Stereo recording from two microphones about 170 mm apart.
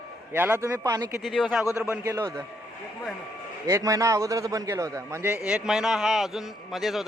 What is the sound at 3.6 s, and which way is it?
A man's voice, 20° right (ahead or behind).